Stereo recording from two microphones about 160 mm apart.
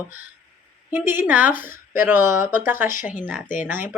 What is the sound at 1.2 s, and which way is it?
Speech, 10° right (ahead or behind).